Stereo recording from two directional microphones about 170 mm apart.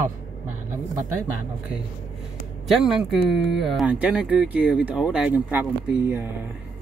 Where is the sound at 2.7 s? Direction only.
Centre (ahead or behind).